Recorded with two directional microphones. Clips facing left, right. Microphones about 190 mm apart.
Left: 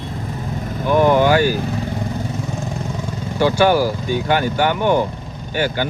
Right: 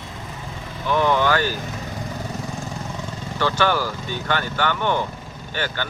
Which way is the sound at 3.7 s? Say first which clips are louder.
Left 7 dB; 40° left (ahead or behind).